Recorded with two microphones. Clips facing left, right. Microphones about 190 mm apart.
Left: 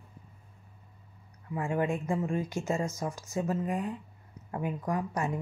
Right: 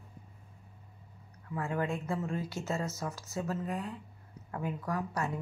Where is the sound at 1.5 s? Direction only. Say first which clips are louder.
Left 4 dB; 15° left (ahead or behind).